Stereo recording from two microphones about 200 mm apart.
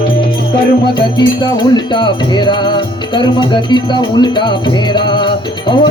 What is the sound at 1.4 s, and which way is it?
Music, 25° left (ahead or behind).